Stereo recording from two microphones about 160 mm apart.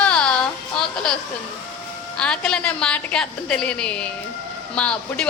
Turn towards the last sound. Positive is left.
turn(degrees=5)  # may be behind; listen again after turning